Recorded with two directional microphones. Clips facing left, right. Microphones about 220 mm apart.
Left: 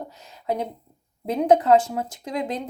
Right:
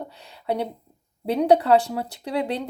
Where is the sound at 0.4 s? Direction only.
35° right (ahead or behind).